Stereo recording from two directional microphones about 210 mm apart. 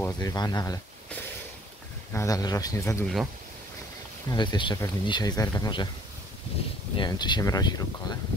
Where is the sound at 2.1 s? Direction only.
15° left (ahead or behind).